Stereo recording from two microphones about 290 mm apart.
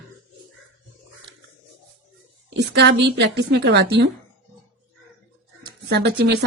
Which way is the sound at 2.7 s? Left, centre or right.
Right.